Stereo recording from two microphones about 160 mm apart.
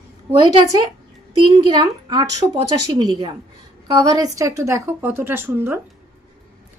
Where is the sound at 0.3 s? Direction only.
25° right (ahead or behind).